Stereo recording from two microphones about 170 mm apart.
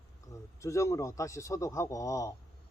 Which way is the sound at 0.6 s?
15° left (ahead or behind).